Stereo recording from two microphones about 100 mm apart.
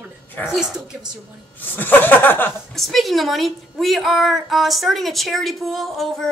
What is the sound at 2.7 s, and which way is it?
A woman's voice, centre (ahead or behind).